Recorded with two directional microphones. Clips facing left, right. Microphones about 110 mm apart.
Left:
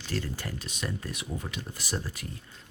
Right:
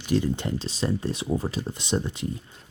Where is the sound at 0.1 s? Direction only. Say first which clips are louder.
Right 10 dB; 20° right (ahead or behind).